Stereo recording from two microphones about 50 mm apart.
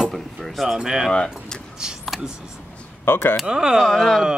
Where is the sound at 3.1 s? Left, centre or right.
Left.